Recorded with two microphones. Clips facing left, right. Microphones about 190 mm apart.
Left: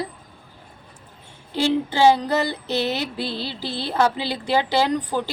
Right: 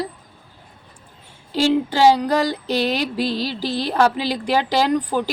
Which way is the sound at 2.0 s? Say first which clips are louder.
Right 2 dB; 10° right (ahead or behind).